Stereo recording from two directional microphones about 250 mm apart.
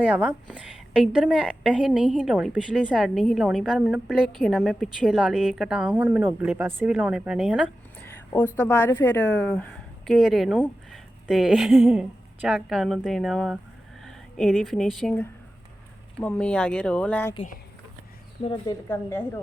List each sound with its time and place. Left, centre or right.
0.0 s a woman's voice: centre
7.9 s a sound: centre
8.5 s a woman's voice: centre
18.6 s a woman's voice: centre